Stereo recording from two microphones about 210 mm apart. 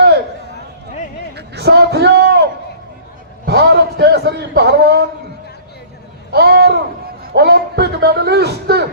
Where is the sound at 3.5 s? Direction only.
50° right (ahead or behind).